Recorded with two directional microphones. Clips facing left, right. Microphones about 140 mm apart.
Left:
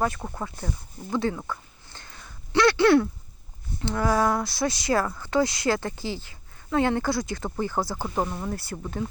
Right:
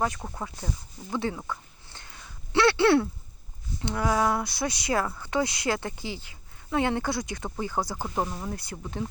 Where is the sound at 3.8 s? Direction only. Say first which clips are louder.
Left 2 dB; 15° right (ahead or behind).